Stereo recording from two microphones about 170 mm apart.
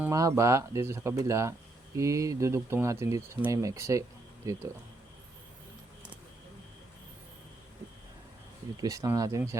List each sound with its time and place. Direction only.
0.0 s speech: 20° right (ahead or behind)
8.8 s speech: 20° right (ahead or behind)